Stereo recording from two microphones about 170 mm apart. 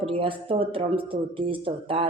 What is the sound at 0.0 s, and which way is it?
Speech, 35° right (ahead or behind).